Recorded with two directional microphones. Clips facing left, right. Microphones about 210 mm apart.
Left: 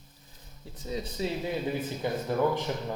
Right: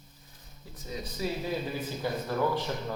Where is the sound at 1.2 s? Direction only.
25° left (ahead or behind).